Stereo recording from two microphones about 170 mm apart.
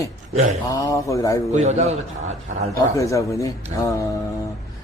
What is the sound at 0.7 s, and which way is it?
Speech, 20° left (ahead or behind).